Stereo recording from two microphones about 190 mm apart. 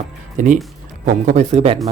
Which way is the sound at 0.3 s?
40° right (ahead or behind).